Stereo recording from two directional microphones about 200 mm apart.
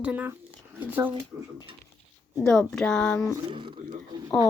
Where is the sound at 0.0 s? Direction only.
10° right (ahead or behind).